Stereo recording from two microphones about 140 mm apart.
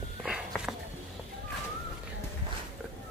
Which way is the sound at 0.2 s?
5° right (ahead or behind).